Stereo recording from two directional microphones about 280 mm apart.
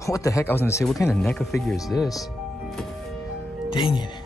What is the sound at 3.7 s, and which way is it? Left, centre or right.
Speech, centre.